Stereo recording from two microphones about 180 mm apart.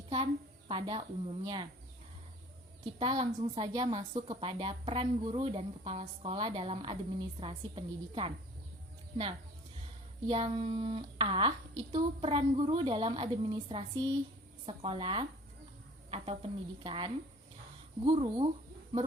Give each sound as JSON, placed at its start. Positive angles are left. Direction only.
{"t": 0.7, "sound": "a woman's voice", "side_deg": -30}
{"t": 3.0, "sound": "a woman's voice", "side_deg": -30}
{"t": 10.2, "sound": "a woman's voice", "side_deg": -30}